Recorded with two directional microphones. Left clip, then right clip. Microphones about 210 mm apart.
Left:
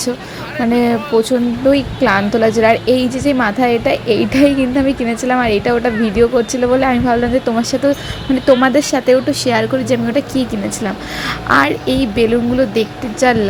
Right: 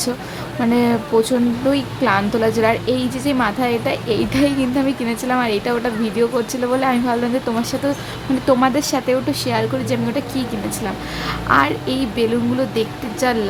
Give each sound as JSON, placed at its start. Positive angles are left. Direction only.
{"t": 0.6, "sound": "speech", "side_deg": 15}
{"t": 8.4, "sound": "speech", "side_deg": 15}
{"t": 11.4, "sound": "speech", "side_deg": 15}